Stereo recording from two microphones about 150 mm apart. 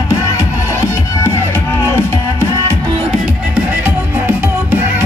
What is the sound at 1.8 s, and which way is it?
Music, 15° left (ahead or behind).